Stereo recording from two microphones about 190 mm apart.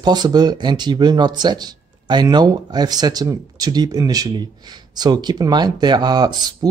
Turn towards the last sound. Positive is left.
turn(degrees=-20)  # may be behind; listen again after turning